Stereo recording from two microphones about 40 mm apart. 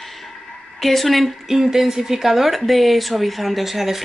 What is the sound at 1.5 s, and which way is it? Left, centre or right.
Speech, centre.